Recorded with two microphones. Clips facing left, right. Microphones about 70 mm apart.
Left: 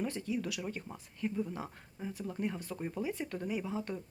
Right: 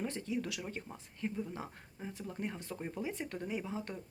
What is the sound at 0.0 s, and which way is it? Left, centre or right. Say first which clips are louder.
Speech: left 2 dB; right.